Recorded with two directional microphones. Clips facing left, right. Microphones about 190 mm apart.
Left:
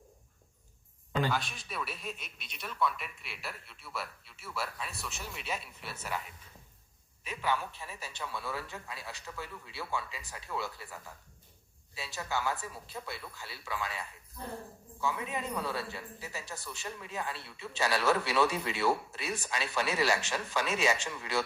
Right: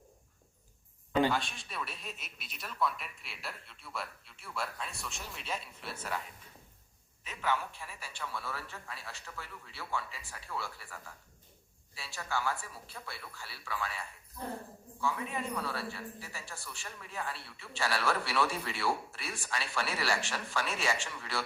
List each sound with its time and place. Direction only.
1.3 s speech: centre (ahead or behind)
7.3 s a man's voice: 15° left (ahead or behind)
11.9 s a man's voice: 20° left (ahead or behind)
15.0 s a man's voice: 20° left (ahead or behind)